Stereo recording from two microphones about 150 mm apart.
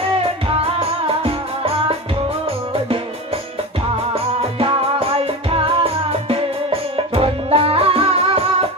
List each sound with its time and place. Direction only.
0.6 s music: 40° right (ahead or behind)
4.6 s music: 35° right (ahead or behind)